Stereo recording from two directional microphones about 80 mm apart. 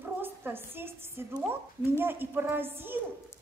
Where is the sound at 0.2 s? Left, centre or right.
Right.